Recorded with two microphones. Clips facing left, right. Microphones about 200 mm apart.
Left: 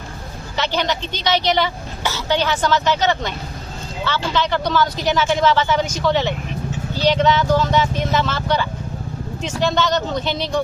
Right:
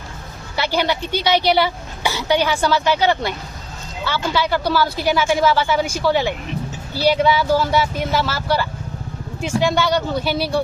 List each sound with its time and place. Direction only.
0.5 s a woman's voice: 10° right (ahead or behind)